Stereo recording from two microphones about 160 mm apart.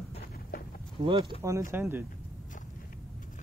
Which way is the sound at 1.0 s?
35° right (ahead or behind).